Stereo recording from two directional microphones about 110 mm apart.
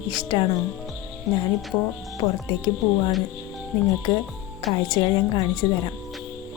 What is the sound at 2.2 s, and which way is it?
Speech, 40° left (ahead or behind).